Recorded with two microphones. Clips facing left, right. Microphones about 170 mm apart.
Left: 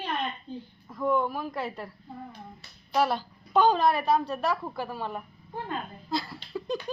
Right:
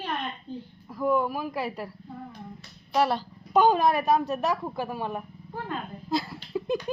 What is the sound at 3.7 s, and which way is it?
A woman's voice, 15° right (ahead or behind).